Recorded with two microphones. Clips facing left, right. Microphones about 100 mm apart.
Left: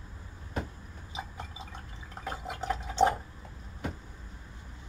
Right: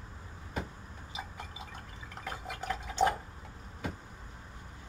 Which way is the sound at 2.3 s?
25° left (ahead or behind).